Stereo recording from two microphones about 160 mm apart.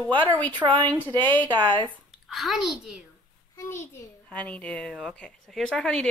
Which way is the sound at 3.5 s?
15° left (ahead or behind).